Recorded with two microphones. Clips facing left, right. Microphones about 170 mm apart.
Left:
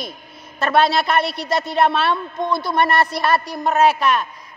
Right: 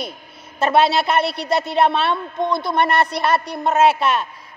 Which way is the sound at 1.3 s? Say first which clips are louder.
Right 1 dB; 65° right (ahead or behind).